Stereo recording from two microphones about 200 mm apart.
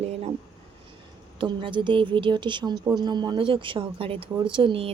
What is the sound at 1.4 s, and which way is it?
Speech, 25° right (ahead or behind).